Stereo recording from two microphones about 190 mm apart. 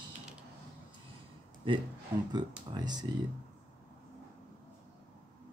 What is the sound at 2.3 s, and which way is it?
Speech, 20° right (ahead or behind).